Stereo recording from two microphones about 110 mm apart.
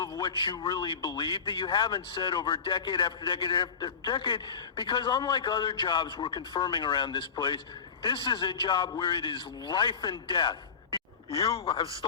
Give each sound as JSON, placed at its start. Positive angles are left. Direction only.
{"t": 0.0, "sound": "a man's voice", "side_deg": 35}
{"t": 11.6, "sound": "a man's voice", "side_deg": 50}